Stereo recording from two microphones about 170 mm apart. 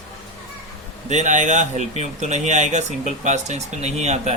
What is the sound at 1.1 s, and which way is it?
Speech, 45° right (ahead or behind).